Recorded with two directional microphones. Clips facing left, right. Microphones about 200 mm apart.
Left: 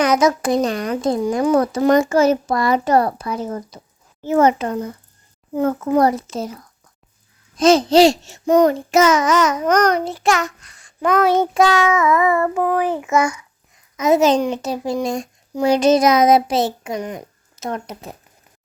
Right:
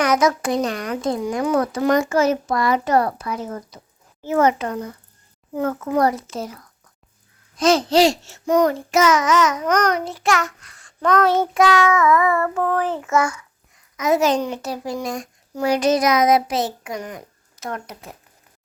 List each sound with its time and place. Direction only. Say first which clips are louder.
0.0 s a child's voice: left 2 dB; 25° left (ahead or behind)
7.6 s a child's voice: left 4 dB; 20° left (ahead or behind)
11.5 s child singing: left 1 dB; 30° left (ahead or behind)
13.9 s a child's voice: left 4 dB; 25° left (ahead or behind)